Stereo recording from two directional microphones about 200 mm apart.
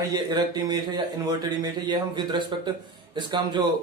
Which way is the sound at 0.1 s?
20° right (ahead or behind).